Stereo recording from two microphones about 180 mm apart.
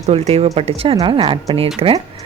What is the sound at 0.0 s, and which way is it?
A woman's voice, 35° right (ahead or behind).